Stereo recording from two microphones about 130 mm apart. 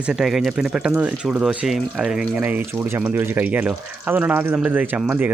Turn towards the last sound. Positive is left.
turn(degrees=-15)  # may be behind; listen again after turning